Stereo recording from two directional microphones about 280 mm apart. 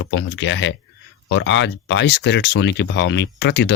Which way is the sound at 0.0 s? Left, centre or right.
Left.